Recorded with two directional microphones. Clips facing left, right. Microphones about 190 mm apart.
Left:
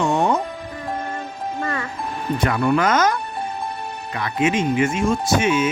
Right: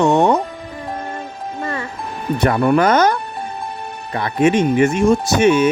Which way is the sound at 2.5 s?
40° right (ahead or behind).